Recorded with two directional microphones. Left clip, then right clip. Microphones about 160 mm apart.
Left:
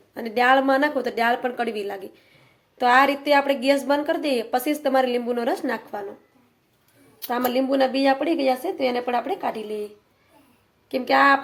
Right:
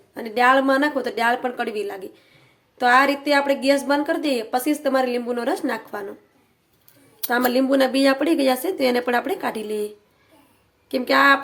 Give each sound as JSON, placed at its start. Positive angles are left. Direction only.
{"t": 0.1, "sound": "a woman's voice", "side_deg": 0}
{"t": 7.3, "sound": "a woman's voice", "side_deg": -15}